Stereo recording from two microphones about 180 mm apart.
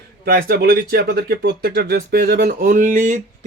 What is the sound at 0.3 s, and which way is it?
Speech, 55° right (ahead or behind).